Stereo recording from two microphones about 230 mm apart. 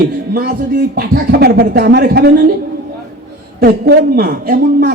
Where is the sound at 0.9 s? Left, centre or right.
Right.